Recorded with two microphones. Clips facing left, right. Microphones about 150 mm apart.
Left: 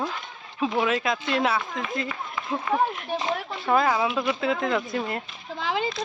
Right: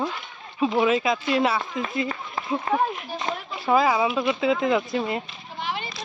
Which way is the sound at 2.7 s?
40° right (ahead or behind).